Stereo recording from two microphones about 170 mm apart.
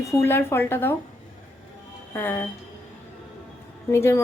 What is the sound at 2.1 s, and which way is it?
Speech, 10° left (ahead or behind).